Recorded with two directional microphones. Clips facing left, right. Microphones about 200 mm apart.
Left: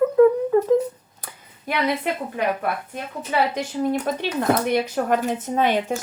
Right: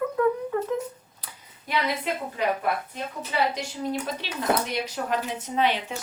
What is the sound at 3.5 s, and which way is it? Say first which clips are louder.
Speech: left 6 dB; 55° left (ahead or behind).